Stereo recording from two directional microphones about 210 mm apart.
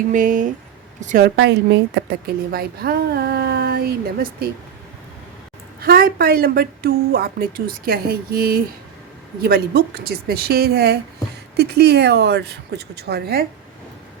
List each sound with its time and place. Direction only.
0.0 s a woman's voice: 40° right (ahead or behind)
5.8 s a woman's voice: 45° right (ahead or behind)